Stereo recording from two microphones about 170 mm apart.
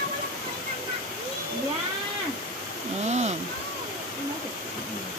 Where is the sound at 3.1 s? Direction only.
40° right (ahead or behind).